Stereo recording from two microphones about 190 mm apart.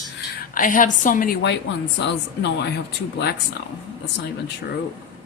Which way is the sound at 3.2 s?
60° left (ahead or behind).